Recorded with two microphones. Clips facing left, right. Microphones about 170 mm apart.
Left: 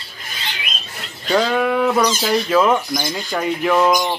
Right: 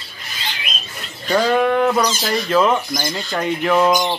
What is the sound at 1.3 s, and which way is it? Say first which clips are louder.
Speech: right 1 dB; 5° left (ahead or behind).